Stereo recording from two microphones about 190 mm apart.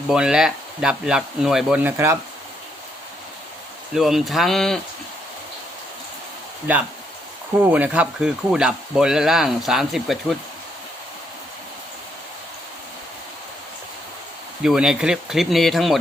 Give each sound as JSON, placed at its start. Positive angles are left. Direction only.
{"t": 0.1, "sound": "speech", "side_deg": -5}
{"t": 3.9, "sound": "speech", "side_deg": 0}
{"t": 7.6, "sound": "speech", "side_deg": -10}
{"t": 14.6, "sound": "speech", "side_deg": -5}